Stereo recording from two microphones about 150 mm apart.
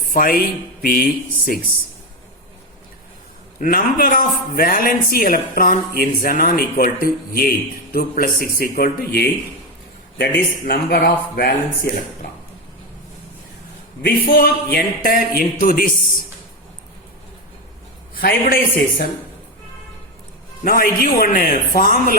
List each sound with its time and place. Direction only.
0.1 s a man's voice: 70° left (ahead or behind)
3.6 s a man's voice: 70° left (ahead or behind); by 11.5 s 90° left
14.0 s a man's voice: 85° left
18.1 s speech: 80° left
20.7 s a man's voice: 75° left (ahead or behind)